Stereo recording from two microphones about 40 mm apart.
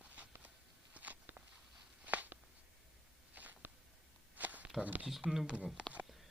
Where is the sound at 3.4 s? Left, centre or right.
Right.